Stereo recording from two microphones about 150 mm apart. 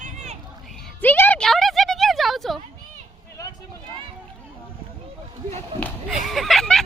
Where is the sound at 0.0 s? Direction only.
50° right (ahead or behind).